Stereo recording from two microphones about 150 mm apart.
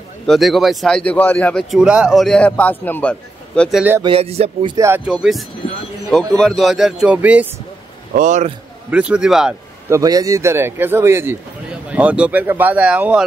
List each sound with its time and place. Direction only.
0.3 s speech: centre (ahead or behind)
4.0 s speech: 40° right (ahead or behind)
4.7 s a man's voice: 20° right (ahead or behind)
5.0 s speech: 5° right (ahead or behind)
8.1 s a man's voice: 55° right (ahead or behind)
8.9 s speech: 5° right (ahead or behind)
9.8 s a man's voice: 20° right (ahead or behind)